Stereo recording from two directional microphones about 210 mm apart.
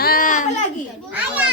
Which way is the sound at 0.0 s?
45° left (ahead or behind).